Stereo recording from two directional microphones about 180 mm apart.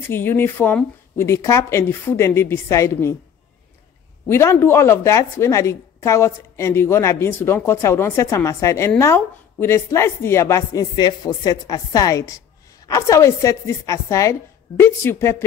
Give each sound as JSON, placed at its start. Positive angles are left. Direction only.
{"t": 0.0, "sound": "a woman's voice", "side_deg": 10}
{"t": 4.3, "sound": "a woman's voice", "side_deg": 15}